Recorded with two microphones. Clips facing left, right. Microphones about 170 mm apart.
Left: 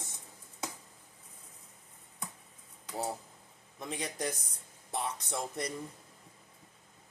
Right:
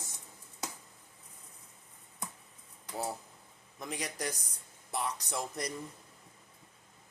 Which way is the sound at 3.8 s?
25° left (ahead or behind).